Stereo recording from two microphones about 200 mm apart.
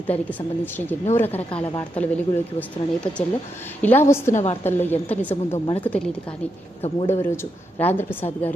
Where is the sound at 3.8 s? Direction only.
10° left (ahead or behind).